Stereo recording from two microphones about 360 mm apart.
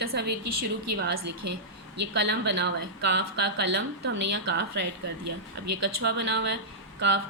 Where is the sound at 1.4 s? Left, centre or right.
Right.